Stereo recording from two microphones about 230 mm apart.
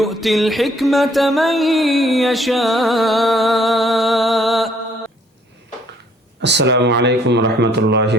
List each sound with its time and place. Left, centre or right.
0.0 s music: centre
6.4 s speech: right